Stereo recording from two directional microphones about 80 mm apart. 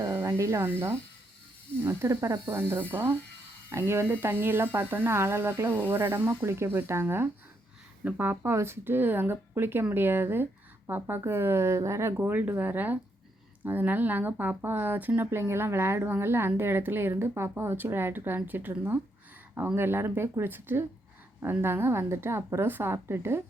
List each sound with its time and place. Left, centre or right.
0.1 s music: right
0.3 s speech: right